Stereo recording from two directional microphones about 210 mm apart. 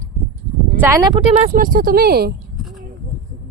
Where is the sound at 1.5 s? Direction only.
40° right (ahead or behind).